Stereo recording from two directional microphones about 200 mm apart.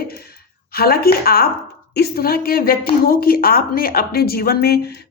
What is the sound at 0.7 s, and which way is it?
Speech, 50° left (ahead or behind).